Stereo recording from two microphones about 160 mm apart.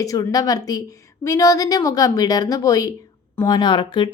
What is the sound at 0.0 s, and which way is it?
A woman's voice, 20° left (ahead or behind).